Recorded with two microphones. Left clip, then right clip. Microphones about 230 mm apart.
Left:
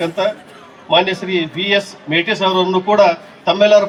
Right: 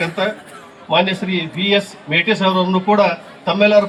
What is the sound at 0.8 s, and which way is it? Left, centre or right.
A man's voice, left.